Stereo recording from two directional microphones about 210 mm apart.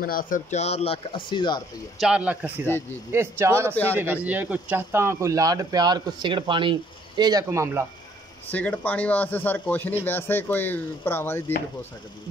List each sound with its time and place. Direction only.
0.0 s speech: 45° left (ahead or behind); by 1.6 s 20° left (ahead or behind)
2.0 s speech: 5° right (ahead or behind)
3.7 s speech: 10° left (ahead or behind)
4.0 s speech: 10° right (ahead or behind)
8.5 s speech: 5° left (ahead or behind)